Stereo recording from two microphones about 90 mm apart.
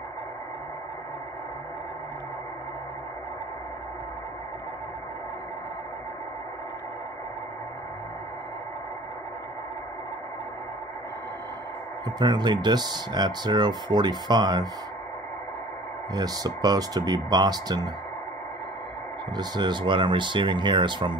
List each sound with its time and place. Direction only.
12.2 s speech: 55° right (ahead or behind)
16.1 s speech: 45° right (ahead or behind)
19.3 s speech: 55° right (ahead or behind)